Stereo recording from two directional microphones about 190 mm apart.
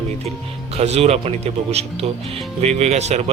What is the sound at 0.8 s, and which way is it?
Speech, 35° right (ahead or behind).